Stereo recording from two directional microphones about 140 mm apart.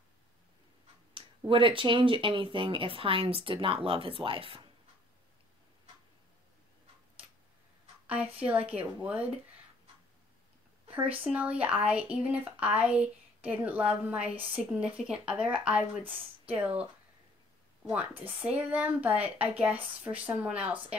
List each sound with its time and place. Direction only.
1.5 s speech: 40° right (ahead or behind)
8.1 s speech: 10° right (ahead or behind)
11.0 s speech: 10° right (ahead or behind)
17.8 s speech: 10° right (ahead or behind)